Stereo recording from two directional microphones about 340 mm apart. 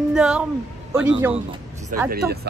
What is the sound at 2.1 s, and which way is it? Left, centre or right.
Speech, right.